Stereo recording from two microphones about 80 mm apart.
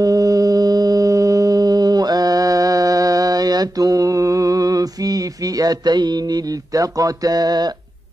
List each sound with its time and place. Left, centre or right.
0.0 s music: right